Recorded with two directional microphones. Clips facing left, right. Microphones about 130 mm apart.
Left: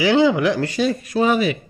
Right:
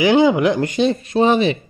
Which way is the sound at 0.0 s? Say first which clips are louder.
Right 2 dB; 20° right (ahead or behind).